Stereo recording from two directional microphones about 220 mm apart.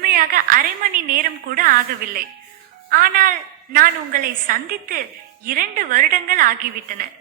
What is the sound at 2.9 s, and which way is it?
A woman's voice, 40° right (ahead or behind).